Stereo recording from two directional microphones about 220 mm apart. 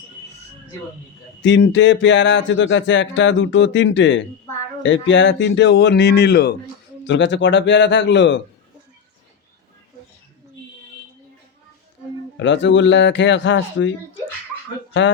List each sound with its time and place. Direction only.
1.4 s speech: 55° left (ahead or behind)
12.4 s speech: 55° left (ahead or behind)